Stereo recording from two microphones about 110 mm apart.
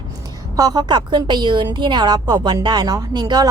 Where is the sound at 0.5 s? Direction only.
35° right (ahead or behind).